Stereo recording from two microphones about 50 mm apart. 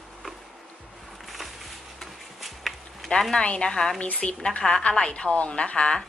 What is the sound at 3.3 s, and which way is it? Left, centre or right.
A woman's voice, left.